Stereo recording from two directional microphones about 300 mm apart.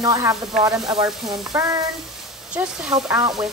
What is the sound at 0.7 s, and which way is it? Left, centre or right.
Sizzle, centre.